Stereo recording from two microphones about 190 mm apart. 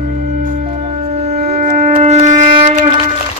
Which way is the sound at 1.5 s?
40° right (ahead or behind).